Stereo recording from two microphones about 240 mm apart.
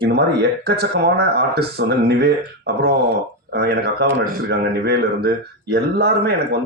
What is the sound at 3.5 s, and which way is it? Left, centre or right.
Speech, right.